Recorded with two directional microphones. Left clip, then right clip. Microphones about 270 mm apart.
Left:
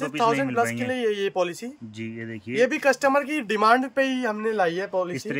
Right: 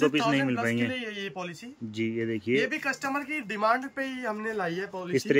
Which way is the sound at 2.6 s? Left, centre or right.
Left.